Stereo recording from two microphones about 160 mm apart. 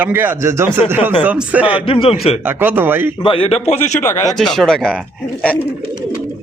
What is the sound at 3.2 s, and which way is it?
Speech, 35° left (ahead or behind).